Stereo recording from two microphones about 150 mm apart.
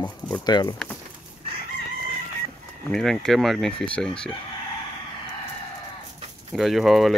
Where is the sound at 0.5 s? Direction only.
25° left (ahead or behind).